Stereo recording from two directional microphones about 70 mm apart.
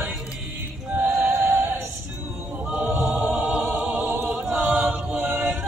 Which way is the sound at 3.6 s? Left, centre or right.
Right.